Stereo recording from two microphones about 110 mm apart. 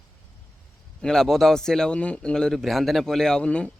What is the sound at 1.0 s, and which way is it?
Speech, 5° left (ahead or behind).